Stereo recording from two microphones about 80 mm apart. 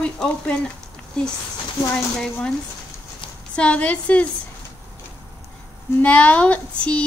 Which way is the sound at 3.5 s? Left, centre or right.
Centre.